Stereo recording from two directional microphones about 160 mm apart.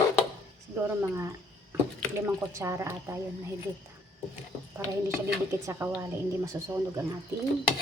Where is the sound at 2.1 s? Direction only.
20° right (ahead or behind).